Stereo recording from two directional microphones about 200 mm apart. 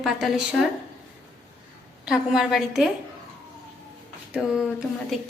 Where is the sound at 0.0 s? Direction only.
Centre (ahead or behind).